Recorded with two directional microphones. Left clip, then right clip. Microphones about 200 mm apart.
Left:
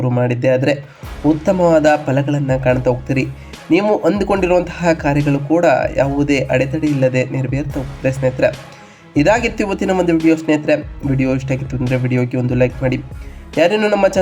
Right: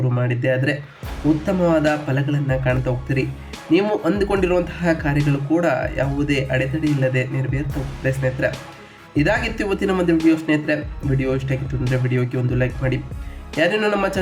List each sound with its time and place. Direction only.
0.0 s a man's voice: 20° left (ahead or behind)